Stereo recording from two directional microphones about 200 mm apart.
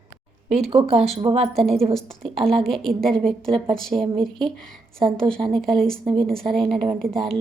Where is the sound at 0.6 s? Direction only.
30° right (ahead or behind).